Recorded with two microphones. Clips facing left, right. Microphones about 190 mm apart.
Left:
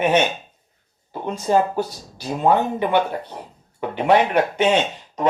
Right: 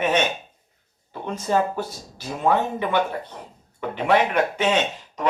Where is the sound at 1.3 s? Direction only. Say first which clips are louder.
Left 3 dB; 30° left (ahead or behind).